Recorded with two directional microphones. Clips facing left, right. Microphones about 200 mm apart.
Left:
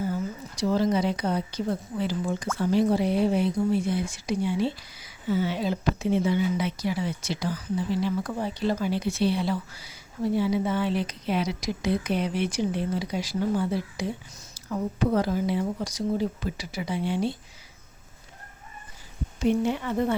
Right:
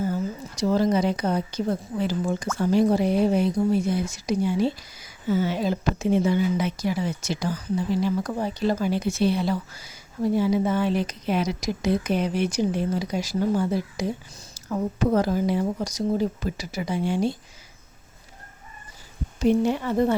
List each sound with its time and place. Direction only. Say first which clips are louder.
0.1 s a woman's voice: right 3 dB; 45° right (ahead or behind)
19.4 s speech: right 3 dB; 40° right (ahead or behind)